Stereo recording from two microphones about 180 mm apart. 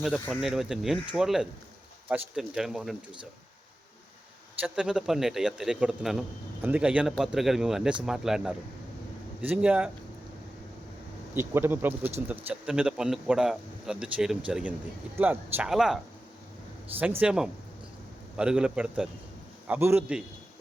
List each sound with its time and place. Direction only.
0.0 s speech: centre (ahead or behind)
4.6 s speech: 5° right (ahead or behind)
11.3 s speech: 15° right (ahead or behind)
17.2 s speech: 5° right (ahead or behind)